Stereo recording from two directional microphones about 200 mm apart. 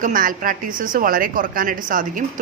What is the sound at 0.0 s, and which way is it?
A woman's voice, 45° right (ahead or behind).